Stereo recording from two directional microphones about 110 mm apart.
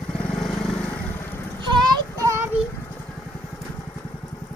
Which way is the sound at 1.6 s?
40° right (ahead or behind).